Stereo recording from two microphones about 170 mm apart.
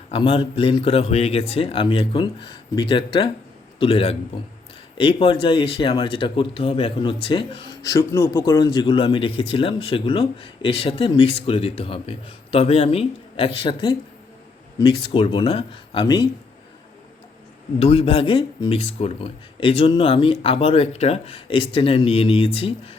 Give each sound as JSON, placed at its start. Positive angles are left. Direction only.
{"t": 0.1, "sound": "speech", "side_deg": 30}
{"t": 17.7, "sound": "speech", "side_deg": 35}